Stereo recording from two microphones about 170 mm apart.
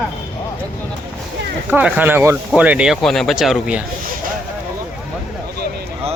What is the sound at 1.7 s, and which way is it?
Speech, 10° right (ahead or behind).